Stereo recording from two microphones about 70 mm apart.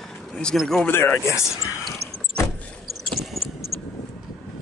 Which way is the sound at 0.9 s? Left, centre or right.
Left.